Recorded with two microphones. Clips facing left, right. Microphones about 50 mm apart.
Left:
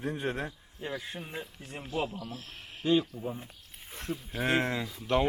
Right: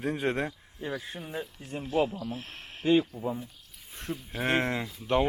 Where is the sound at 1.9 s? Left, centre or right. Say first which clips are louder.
Right 6 dB; right.